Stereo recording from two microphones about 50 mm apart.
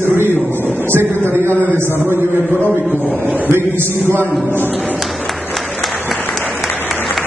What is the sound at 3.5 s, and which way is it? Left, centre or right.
A man's voice, right.